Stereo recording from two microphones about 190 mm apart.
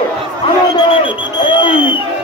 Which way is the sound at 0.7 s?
25° left (ahead or behind).